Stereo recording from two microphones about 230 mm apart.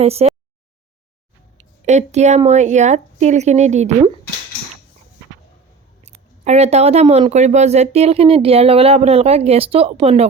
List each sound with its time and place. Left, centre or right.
0.0 s speech: right
1.5 s speech: right
6.0 s speech: right